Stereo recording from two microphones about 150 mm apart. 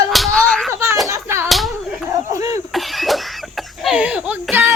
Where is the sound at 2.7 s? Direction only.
Centre (ahead or behind).